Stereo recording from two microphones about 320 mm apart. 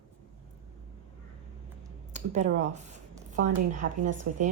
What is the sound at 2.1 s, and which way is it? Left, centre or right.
Speech, right.